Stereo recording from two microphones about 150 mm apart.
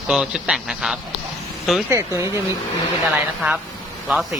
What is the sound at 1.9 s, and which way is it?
Speech, 20° right (ahead or behind).